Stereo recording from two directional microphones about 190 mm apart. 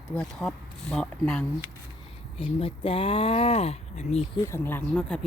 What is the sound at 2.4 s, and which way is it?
Speech, 30° left (ahead or behind).